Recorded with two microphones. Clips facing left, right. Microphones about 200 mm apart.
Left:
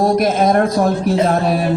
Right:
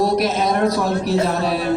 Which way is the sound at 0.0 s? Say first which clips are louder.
Left 4 dB; 50° left (ahead or behind).